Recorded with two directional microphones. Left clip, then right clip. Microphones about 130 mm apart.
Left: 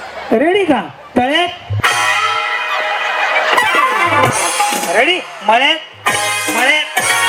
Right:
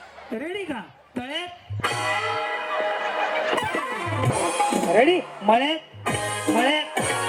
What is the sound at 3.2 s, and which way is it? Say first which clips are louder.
Music: left 14 dB; 35° left (ahead or behind).